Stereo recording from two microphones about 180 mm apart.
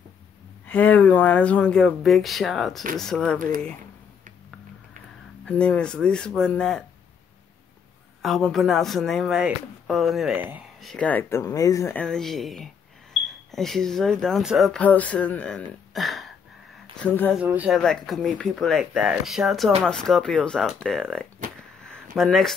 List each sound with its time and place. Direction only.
0.7 s speech: 10° left (ahead or behind)
3.3 s speech: 50° right (ahead or behind)
5.4 s speech: 5° left (ahead or behind)
8.2 s speech: centre (ahead or behind)
10.8 s speech: 5° left (ahead or behind)
17.4 s speech: 10° right (ahead or behind)
21.5 s a sound: 5° left (ahead or behind)
22.1 s speech: centre (ahead or behind)